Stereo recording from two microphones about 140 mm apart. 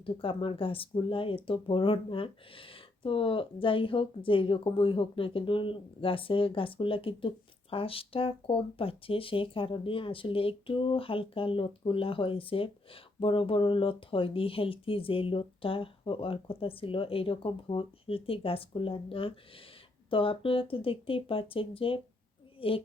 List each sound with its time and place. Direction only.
0.0 s a woman's voice: 40° left (ahead or behind)